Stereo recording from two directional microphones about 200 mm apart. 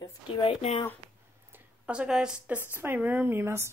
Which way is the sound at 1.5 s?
5° right (ahead or behind).